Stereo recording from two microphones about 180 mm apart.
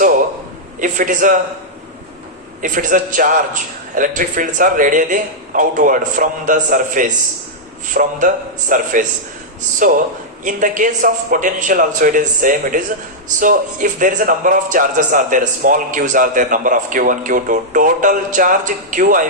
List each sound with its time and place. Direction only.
0.8 s speech: 45° right (ahead or behind)
2.6 s a man's voice: 45° right (ahead or behind)